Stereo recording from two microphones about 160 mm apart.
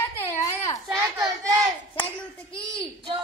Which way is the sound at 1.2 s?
20° right (ahead or behind).